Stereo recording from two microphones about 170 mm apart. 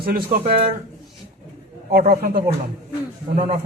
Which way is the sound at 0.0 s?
60° right (ahead or behind).